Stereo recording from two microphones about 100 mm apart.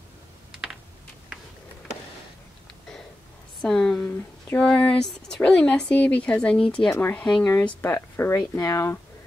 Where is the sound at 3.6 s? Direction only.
5° left (ahead or behind).